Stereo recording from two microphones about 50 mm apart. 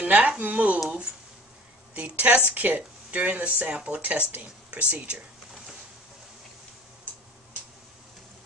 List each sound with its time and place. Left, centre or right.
0.0 s speech: right
2.0 s speech: right
4.0 s speech: right